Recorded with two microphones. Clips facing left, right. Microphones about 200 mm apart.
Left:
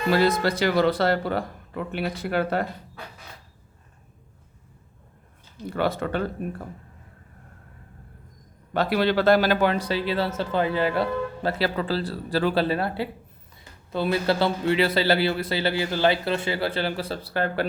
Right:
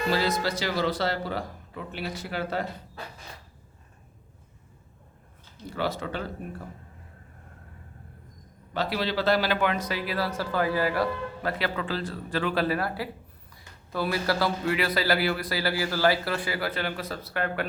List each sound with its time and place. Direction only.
0.1 s a man's voice: 55° left (ahead or behind)
5.7 s a man's voice: 55° left (ahead or behind)
8.7 s a man's voice: 55° left (ahead or behind); by 17.7 s 30° left (ahead or behind)